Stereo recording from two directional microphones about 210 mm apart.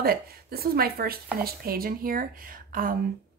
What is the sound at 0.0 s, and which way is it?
Speech, 45° right (ahead or behind).